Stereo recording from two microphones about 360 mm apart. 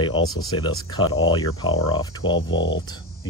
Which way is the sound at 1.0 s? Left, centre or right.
Left.